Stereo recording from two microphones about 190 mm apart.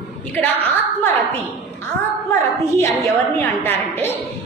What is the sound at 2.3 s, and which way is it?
A woman's voice, 15° left (ahead or behind).